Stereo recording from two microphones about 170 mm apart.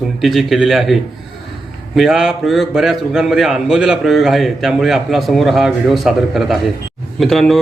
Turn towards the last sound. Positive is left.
turn(degrees=0)  # may be behind; listen again after turning